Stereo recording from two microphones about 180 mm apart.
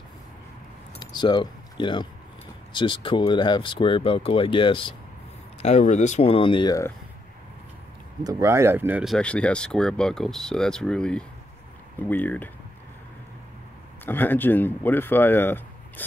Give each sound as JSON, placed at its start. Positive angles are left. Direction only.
{"t": 0.9, "sound": "keys jangling", "side_deg": 25}
{"t": 2.7, "sound": "speech", "side_deg": 25}
{"t": 5.6, "sound": "speech", "side_deg": 40}
{"t": 8.2, "sound": "speech", "side_deg": -20}
{"t": 14.0, "sound": "speech", "side_deg": 10}